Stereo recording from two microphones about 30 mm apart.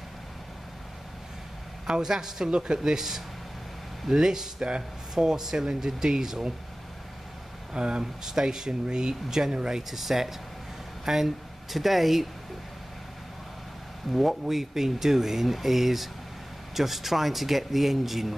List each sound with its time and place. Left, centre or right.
1.9 s speech: right
4.6 s speech: right
5.1 s speech: centre
7.7 s speech: right
8.0 s speech: centre
9.8 s speech: centre
14.1 s speech: centre